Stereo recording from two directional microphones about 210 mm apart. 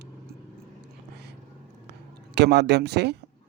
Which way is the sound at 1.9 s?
55° right (ahead or behind).